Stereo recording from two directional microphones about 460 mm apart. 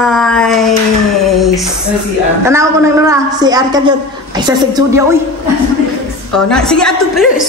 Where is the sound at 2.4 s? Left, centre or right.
Centre.